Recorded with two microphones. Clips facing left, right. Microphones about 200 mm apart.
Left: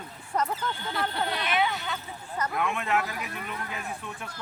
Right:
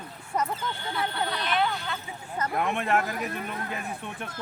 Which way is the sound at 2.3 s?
35° right (ahead or behind).